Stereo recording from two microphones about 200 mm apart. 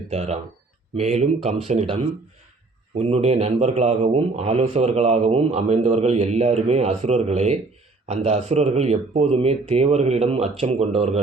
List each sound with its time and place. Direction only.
0.1 s a man's voice: 35° right (ahead or behind)